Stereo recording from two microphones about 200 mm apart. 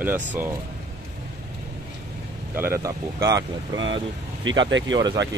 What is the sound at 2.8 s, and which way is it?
Speech, 15° right (ahead or behind).